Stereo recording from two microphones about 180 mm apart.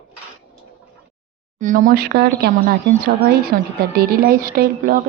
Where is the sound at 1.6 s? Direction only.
45° right (ahead or behind).